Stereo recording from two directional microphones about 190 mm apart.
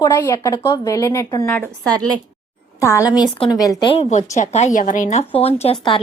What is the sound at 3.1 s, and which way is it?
Speech, 25° left (ahead or behind).